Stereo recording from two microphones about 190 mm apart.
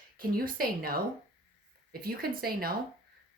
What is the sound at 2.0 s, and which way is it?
Speech, 50° right (ahead or behind).